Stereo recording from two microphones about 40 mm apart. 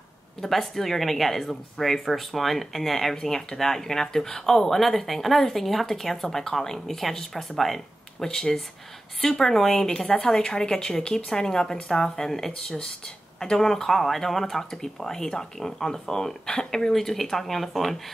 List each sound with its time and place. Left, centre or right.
0.4 s speech: centre
8.3 s speech: centre